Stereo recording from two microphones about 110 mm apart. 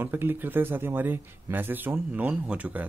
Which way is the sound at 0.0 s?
20° right (ahead or behind).